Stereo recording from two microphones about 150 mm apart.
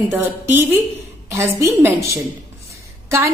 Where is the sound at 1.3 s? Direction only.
15° right (ahead or behind).